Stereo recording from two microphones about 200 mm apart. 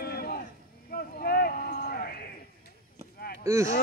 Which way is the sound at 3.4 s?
15° right (ahead or behind).